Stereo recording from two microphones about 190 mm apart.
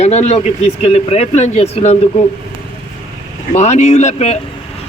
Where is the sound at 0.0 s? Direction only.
35° left (ahead or behind).